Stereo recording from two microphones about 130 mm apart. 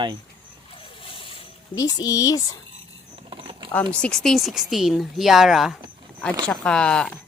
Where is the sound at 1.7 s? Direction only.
25° left (ahead or behind).